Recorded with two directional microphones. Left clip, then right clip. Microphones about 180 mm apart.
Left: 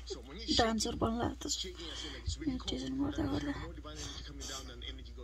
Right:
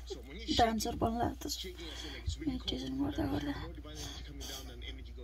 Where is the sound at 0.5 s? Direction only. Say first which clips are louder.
Right 1 dB; 20° left (ahead or behind).